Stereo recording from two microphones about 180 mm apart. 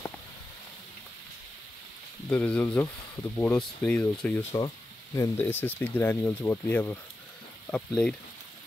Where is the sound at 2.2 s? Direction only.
5° left (ahead or behind).